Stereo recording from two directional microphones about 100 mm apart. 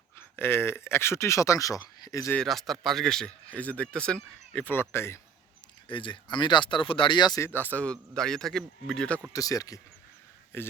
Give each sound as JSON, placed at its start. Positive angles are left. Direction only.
{"t": 0.2, "sound": "speech", "side_deg": 20}
{"t": 2.3, "sound": "speech", "side_deg": 5}
{"t": 5.9, "sound": "speech", "side_deg": 55}
{"t": 7.3, "sound": "speech", "side_deg": 25}
{"t": 9.3, "sound": "speech", "side_deg": 35}
{"t": 10.5, "sound": "speech", "side_deg": 20}